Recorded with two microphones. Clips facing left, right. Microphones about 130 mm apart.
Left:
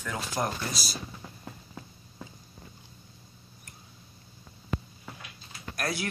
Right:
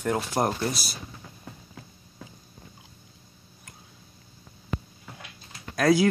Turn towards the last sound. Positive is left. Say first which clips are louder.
# right 13 dB
turn(degrees=-90)